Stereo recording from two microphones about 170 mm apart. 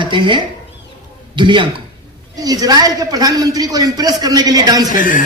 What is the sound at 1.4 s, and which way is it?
A man's voice, 30° right (ahead or behind).